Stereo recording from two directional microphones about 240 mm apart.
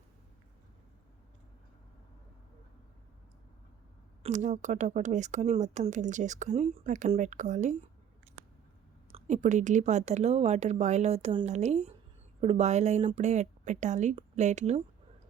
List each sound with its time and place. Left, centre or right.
4.2 s speech: right
9.1 s speech: right